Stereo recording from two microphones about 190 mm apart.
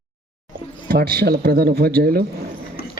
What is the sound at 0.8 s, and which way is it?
Speech, 55° right (ahead or behind).